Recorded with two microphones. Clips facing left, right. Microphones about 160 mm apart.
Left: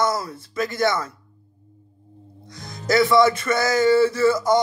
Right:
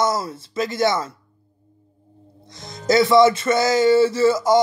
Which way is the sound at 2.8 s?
20° right (ahead or behind).